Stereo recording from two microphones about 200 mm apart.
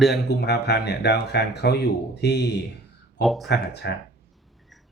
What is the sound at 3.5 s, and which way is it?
Speech, 55° left (ahead or behind).